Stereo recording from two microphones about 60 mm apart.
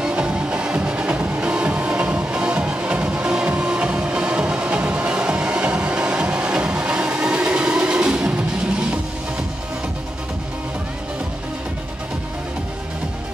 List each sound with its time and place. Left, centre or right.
0.0 s music: centre